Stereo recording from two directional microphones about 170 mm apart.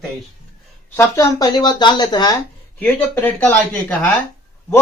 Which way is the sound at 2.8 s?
10° left (ahead or behind).